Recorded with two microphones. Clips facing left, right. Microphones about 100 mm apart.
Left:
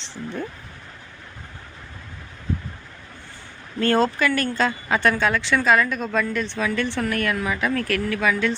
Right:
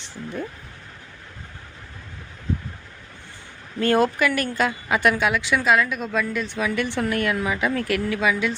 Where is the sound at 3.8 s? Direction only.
10° right (ahead or behind).